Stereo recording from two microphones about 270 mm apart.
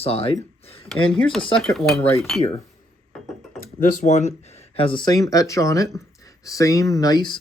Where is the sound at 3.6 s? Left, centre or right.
Left.